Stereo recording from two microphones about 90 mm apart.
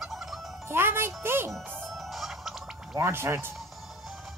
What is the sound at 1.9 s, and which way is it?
Music, centre (ahead or behind).